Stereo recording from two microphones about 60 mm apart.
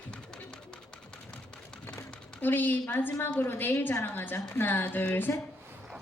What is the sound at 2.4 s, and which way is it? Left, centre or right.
A woman's voice, left.